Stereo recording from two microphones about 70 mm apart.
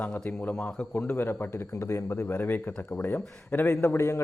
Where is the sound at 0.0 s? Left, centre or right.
Left.